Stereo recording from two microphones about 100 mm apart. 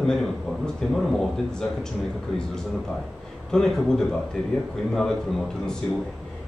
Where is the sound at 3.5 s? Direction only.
5° left (ahead or behind).